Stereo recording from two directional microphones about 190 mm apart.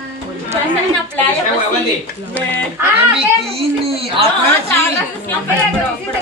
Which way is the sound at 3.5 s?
30° right (ahead or behind).